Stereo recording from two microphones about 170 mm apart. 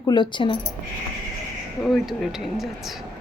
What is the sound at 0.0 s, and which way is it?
Speech, 25° left (ahead or behind).